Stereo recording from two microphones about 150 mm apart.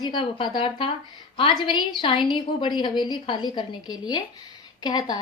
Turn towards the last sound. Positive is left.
turn(degrees=25)  # may be behind; listen again after turning